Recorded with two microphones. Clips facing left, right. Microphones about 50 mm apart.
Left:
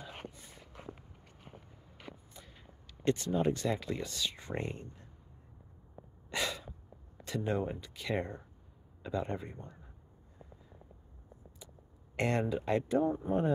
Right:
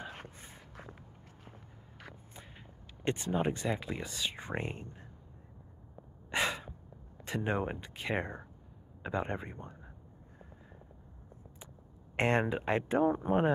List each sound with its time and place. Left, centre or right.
0.0 s a sound: right
3.0 s a sound: right
3.3 s speech: right
6.3 s gasp: right
7.2 s speech: right
12.2 s speech: right
13.0 s speech: right